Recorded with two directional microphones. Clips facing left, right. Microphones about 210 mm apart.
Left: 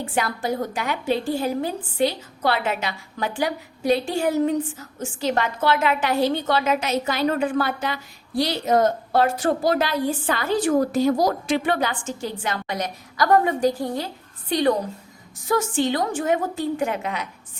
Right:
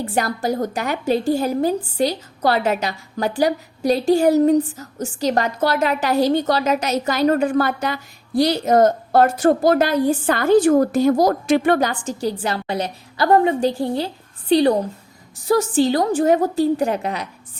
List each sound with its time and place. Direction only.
0.0 s a woman's voice: 40° right (ahead or behind)